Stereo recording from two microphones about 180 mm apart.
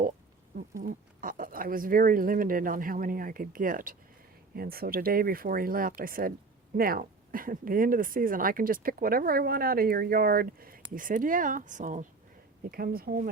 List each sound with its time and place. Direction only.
0.8 s speech: 50° right (ahead or behind)
12.7 s speech: 55° right (ahead or behind)